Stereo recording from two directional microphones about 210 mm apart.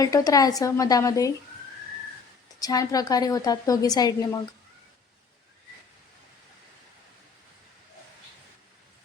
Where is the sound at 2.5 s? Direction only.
15° left (ahead or behind).